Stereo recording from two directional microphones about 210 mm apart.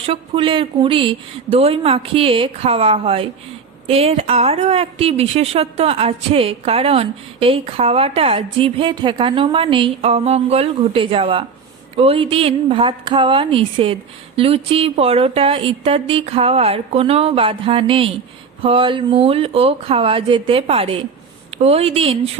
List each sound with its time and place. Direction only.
0.0 s a woman's voice: 25° right (ahead or behind)